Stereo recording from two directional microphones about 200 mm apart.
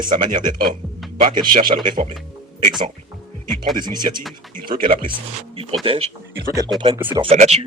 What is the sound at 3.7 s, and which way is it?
Speech, 20° right (ahead or behind).